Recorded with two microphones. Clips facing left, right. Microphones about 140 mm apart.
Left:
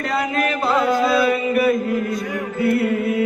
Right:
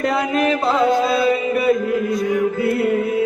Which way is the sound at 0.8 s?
25° right (ahead or behind).